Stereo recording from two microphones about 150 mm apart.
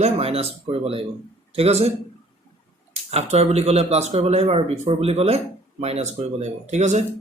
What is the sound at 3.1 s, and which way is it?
Speech, 45° right (ahead or behind).